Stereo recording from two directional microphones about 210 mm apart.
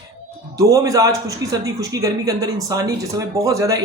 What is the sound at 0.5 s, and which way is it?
Speech, 15° right (ahead or behind).